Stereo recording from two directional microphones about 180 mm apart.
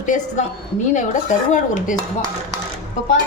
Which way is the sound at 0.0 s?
45° left (ahead or behind).